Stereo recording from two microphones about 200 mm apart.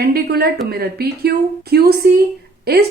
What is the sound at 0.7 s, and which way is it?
A woman's voice, 50° right (ahead or behind).